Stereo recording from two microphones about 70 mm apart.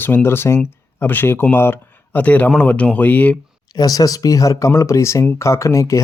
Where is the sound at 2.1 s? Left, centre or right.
Left.